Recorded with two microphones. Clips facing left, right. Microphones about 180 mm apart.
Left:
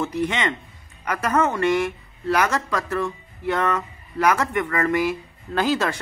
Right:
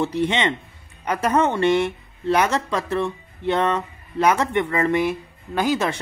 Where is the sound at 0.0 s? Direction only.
30° right (ahead or behind).